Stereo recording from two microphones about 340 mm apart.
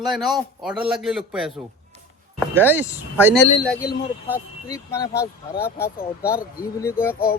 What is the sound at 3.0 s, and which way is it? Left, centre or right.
Speech, centre.